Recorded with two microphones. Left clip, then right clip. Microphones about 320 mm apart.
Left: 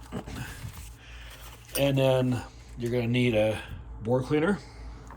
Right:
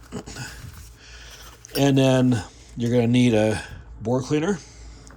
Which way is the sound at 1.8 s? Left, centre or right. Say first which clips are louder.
Right 5 dB; right.